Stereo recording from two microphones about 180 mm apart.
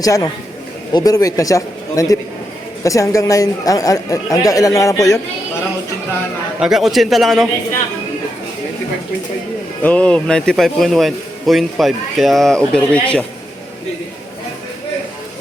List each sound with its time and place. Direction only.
0.0 s speech: 20° left (ahead or behind)
6.6 s a man's voice: centre (ahead or behind)
9.8 s a man's voice: 5° left (ahead or behind)